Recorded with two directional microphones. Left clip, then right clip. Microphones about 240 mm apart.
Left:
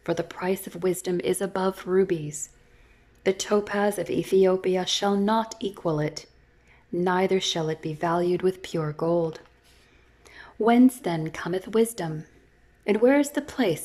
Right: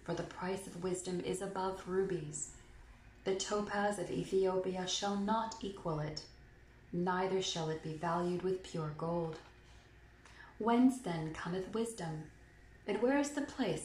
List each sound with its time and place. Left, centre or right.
0.0 s speech: left
10.4 s speech: left